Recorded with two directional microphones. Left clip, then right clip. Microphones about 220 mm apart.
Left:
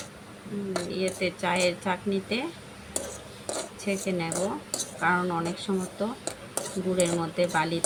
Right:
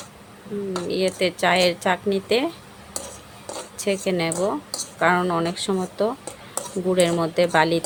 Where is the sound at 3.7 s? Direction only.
50° right (ahead or behind).